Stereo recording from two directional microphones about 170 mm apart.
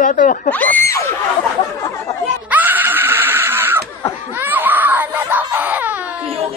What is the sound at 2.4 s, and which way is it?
Screaming, 10° right (ahead or behind).